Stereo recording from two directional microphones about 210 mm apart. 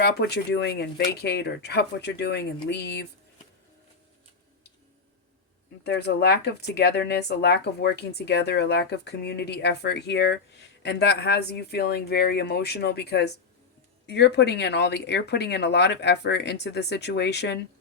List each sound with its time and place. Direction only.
0.0 s speech: 50° left (ahead or behind)
5.8 s speech: 50° left (ahead or behind)